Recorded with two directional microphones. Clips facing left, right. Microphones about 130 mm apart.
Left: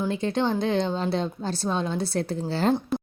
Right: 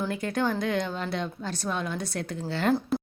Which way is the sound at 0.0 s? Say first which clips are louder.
Left 3 dB; 25° left (ahead or behind).